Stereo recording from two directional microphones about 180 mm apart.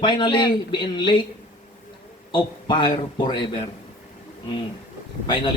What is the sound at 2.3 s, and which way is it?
A man's voice, 25° left (ahead or behind).